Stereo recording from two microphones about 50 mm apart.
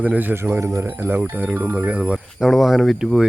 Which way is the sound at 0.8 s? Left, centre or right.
Right.